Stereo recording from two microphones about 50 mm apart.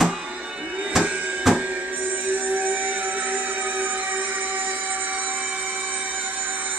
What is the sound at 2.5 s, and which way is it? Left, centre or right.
Music, right.